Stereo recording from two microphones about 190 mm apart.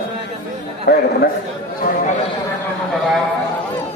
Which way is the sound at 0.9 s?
60° left (ahead or behind).